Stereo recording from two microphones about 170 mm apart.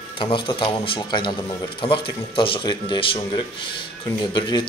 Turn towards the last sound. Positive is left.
turn(degrees=25)  # may be behind; listen again after turning